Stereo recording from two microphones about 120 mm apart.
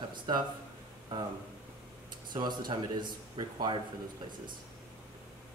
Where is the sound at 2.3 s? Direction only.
35° right (ahead or behind).